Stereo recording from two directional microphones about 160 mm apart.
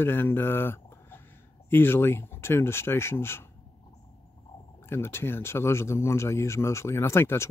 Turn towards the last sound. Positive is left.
turn(degrees=15)  # may be behind; listen again after turning